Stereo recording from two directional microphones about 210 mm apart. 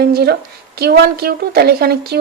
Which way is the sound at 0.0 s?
50° right (ahead or behind).